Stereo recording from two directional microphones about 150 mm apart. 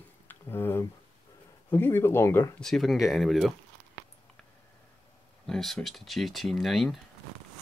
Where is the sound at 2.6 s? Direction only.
Centre (ahead or behind).